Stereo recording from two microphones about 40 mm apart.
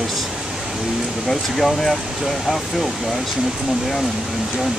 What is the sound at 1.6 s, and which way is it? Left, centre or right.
Speech, centre.